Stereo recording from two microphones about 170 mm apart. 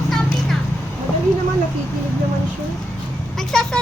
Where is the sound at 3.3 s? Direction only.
5° left (ahead or behind).